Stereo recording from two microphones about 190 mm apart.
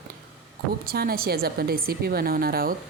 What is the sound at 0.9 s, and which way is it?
Speech, 50° right (ahead or behind).